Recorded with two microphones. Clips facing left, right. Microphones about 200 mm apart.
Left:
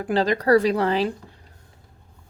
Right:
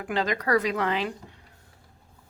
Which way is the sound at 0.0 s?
35° left (ahead or behind).